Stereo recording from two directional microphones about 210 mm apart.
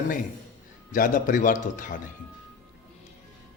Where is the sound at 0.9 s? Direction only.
40° left (ahead or behind).